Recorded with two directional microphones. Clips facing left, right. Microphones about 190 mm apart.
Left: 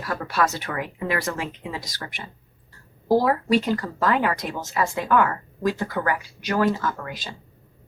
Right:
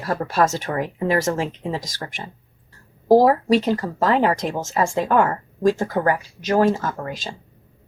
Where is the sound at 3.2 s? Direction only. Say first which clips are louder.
Right 4 dB; 35° right (ahead or behind).